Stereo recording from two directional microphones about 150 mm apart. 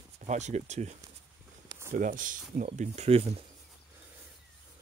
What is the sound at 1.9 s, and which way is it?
Speech, 60° right (ahead or behind).